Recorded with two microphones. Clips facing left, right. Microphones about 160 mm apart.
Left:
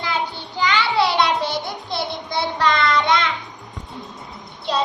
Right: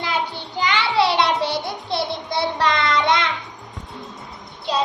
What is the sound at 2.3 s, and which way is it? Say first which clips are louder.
Child singing: left 1 dB; 30° right (ahead or behind).